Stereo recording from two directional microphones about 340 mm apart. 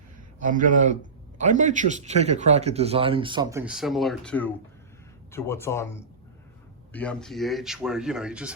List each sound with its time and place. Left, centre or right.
0.4 s a man's voice: right; by 8.5 s centre